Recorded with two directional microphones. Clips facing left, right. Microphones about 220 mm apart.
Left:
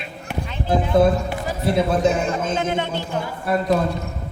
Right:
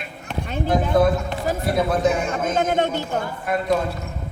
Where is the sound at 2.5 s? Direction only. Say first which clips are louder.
Right 2 dB; 50° right (ahead or behind).